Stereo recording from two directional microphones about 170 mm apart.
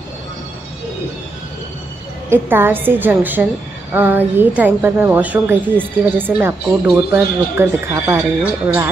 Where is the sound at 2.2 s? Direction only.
15° right (ahead or behind).